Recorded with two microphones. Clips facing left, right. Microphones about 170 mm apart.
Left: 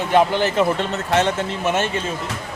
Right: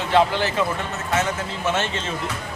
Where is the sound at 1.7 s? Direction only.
15° left (ahead or behind).